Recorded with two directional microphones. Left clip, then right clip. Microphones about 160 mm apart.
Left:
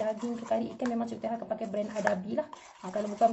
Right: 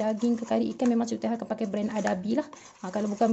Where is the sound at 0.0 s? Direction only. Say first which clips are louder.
Right 5 dB; 75° right (ahead or behind).